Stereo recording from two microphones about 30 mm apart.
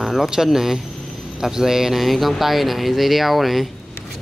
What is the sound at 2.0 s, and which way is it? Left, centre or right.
Speech, centre.